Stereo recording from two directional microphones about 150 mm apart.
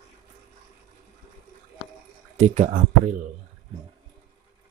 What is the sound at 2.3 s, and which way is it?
Speech, 50° right (ahead or behind).